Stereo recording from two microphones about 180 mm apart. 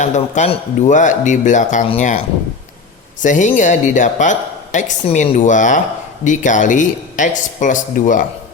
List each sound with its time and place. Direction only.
0.0 s speech: 40° left (ahead or behind)